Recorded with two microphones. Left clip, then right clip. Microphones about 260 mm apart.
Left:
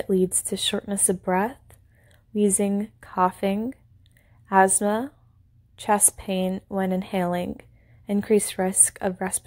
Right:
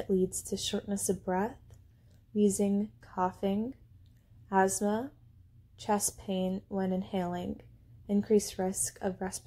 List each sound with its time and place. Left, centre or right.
0.1 s a woman's voice: left